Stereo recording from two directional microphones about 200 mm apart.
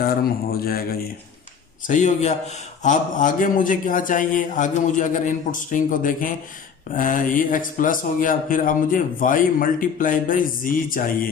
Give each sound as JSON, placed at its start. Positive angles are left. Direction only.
{"t": 0.0, "sound": "a man's voice", "side_deg": 50}
{"t": 1.9, "sound": "a man's voice", "side_deg": 40}